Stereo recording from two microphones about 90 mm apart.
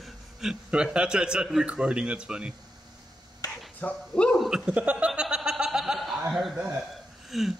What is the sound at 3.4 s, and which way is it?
Finger snapping, 45° left (ahead or behind).